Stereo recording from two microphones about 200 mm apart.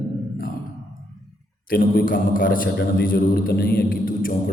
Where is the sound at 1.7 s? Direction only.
45° left (ahead or behind).